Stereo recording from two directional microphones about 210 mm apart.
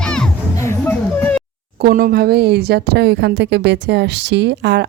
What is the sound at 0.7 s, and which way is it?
Music, 10° left (ahead or behind).